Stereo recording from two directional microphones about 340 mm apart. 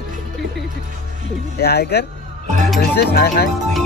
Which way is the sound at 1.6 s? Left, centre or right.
Left.